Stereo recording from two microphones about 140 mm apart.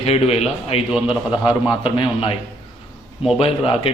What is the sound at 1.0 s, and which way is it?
A man's voice, 35° left (ahead or behind).